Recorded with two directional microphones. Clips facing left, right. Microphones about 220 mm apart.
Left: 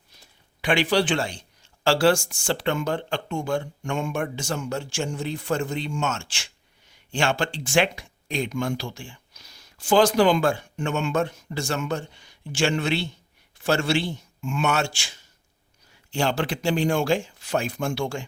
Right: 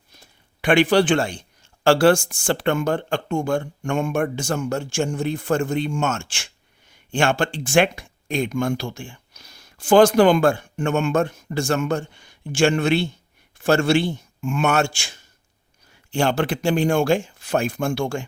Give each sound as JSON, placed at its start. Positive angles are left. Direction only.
{"t": 0.2, "sound": "a man's voice", "side_deg": -50}